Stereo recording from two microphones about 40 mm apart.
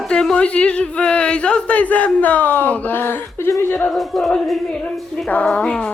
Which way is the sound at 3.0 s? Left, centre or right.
Left.